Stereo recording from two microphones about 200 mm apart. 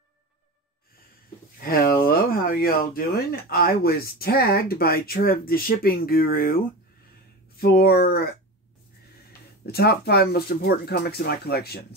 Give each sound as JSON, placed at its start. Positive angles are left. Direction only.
{"t": 1.6, "sound": "speech", "side_deg": 45}
{"t": 9.7, "sound": "speech", "side_deg": 55}